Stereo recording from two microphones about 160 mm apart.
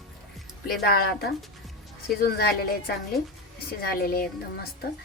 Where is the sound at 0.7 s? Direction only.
70° left (ahead or behind).